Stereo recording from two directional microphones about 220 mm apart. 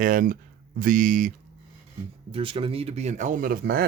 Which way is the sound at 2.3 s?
25° right (ahead or behind).